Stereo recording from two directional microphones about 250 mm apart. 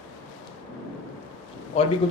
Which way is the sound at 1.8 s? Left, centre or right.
Left.